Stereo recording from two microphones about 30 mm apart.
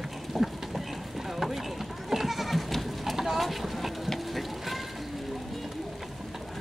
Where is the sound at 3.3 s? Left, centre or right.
Centre.